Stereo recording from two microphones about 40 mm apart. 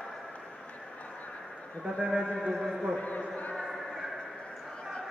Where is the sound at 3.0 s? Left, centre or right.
Left.